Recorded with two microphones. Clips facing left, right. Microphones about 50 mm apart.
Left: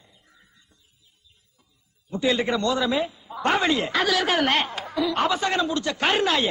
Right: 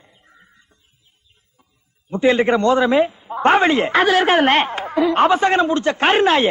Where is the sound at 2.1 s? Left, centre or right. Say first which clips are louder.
Right 8 dB; right.